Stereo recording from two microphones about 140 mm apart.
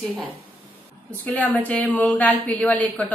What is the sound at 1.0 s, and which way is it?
A woman's voice, 10° left (ahead or behind).